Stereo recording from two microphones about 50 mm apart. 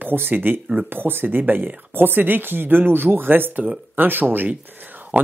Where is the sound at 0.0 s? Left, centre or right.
Right.